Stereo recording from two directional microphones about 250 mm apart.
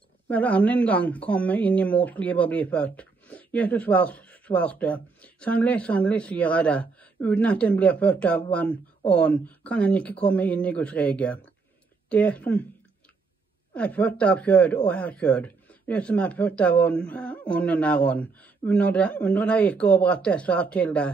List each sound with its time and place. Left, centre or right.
0.3 s speech: centre
13.7 s speech: centre